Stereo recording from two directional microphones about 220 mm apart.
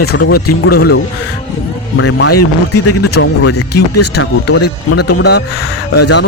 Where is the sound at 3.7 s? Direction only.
50° left (ahead or behind).